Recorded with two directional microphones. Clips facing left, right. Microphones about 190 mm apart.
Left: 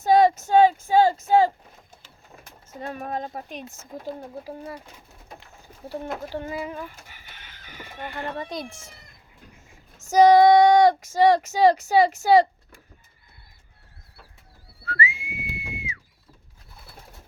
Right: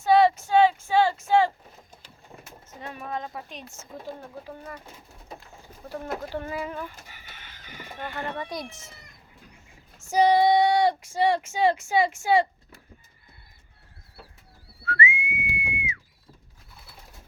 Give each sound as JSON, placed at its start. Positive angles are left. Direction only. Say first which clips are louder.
{"t": 0.0, "sound": "a sound", "louder": "left 2 dB", "side_deg": 45}
{"t": 2.8, "sound": "child singing", "louder": "left 3 dB", "side_deg": 45}
{"t": 6.3, "sound": "speech", "louder": "left 1 dB", "side_deg": 15}
{"t": 8.4, "sound": "speech", "louder": "left 1 dB", "side_deg": 25}
{"t": 10.0, "sound": "child singing", "louder": "left 5 dB", "side_deg": 45}
{"t": 14.8, "sound": "whistling", "louder": "right 1 dB", "side_deg": 35}